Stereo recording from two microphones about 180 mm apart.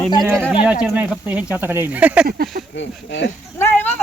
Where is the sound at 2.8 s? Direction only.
80° left.